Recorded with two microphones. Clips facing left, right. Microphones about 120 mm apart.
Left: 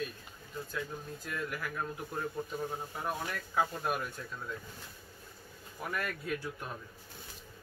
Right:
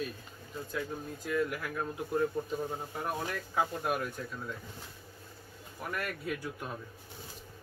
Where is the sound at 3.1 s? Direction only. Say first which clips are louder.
Right 1 dB; 10° right (ahead or behind).